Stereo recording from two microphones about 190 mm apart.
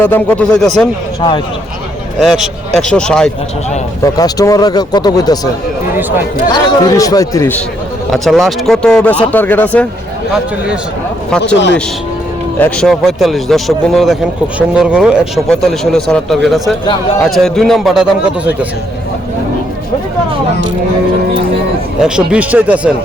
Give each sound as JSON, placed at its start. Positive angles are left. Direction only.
{"t": 0.0, "sound": "speech", "side_deg": 10}
{"t": 2.1, "sound": "speech", "side_deg": 0}
{"t": 4.0, "sound": "speech", "side_deg": 20}
{"t": 6.0, "sound": "speech", "side_deg": -10}
{"t": 6.5, "sound": "speech", "side_deg": 20}
{"t": 8.1, "sound": "speech", "side_deg": 0}
{"t": 11.3, "sound": "speech", "side_deg": 5}
{"t": 12.5, "sound": "speech", "side_deg": 5}
{"t": 22.0, "sound": "speech", "side_deg": -5}